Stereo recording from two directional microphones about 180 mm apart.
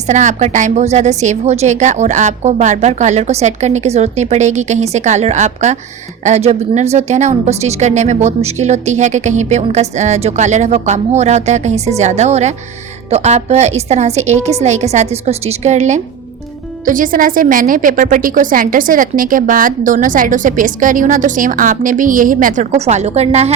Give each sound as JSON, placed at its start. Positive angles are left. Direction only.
{"t": 0.1, "sound": "a woman's voice", "side_deg": -40}